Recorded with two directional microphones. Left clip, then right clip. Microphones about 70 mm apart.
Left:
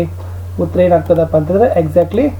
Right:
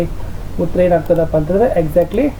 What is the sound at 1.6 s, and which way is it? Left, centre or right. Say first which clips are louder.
Speech: left 2 dB; right.